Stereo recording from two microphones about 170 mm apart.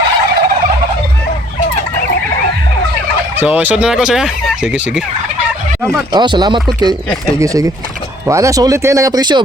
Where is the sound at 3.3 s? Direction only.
10° right (ahead or behind).